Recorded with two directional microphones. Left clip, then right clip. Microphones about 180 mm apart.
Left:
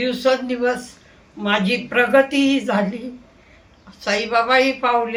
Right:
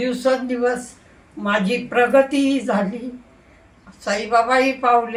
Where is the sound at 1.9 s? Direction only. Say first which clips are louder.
Even; 30° left (ahead or behind).